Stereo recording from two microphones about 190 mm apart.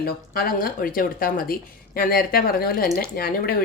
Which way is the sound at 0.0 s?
50° left (ahead or behind).